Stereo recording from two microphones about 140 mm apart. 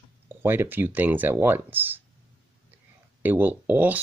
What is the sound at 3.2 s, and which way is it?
Speech, 10° right (ahead or behind).